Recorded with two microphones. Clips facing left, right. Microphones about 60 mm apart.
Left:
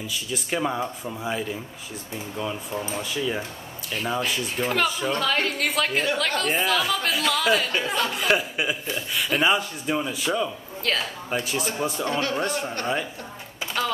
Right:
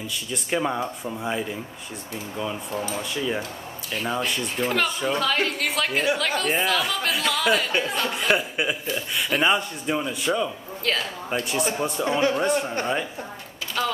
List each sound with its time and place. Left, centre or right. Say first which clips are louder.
0.1 s speech: right 2 dB; centre
2.9 s speech: left 1 dB; centre
12.0 s a man's voice: right 6 dB; centre
12.4 s speech: right 3 dB; centre
13.8 s a sound: right 1 dB; centre